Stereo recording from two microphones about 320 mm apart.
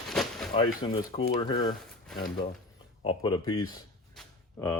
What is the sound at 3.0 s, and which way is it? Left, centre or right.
Speech, centre.